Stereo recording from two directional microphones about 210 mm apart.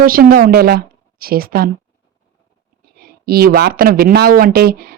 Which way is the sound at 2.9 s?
45° right (ahead or behind).